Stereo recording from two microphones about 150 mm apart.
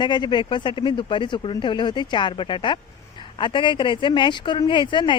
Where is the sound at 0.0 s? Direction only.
30° left (ahead or behind).